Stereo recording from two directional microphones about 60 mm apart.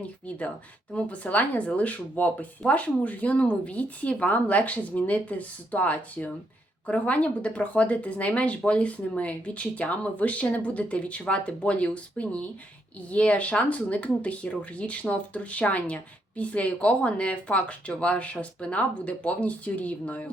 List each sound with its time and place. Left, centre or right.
0.0 s speech: left